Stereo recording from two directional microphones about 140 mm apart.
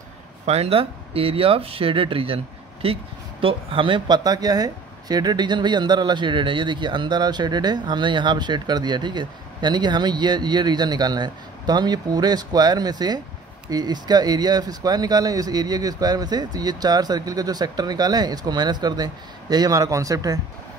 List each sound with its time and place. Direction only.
0.5 s speech: 45° right (ahead or behind); by 20.3 s 25° right (ahead or behind)